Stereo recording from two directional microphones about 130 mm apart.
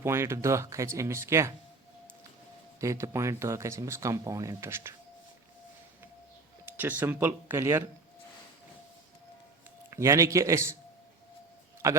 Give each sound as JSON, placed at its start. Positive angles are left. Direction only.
{"t": 0.0, "sound": "speech", "side_deg": -20}
{"t": 2.8, "sound": "speech", "side_deg": -25}
{"t": 6.7, "sound": "speech", "side_deg": -15}
{"t": 9.9, "sound": "speech", "side_deg": -20}
{"t": 11.8, "sound": "speech", "side_deg": -25}